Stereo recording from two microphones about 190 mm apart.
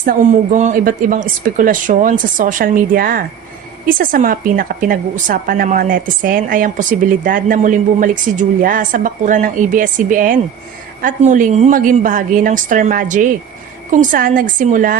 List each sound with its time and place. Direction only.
0.0 s a woman's voice: 45° right (ahead or behind)